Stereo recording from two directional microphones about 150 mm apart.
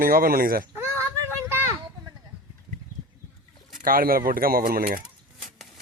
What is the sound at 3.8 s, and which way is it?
Speech, 70° right (ahead or behind).